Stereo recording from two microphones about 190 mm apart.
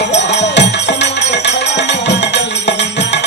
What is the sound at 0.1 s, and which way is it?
Music, 65° left (ahead or behind).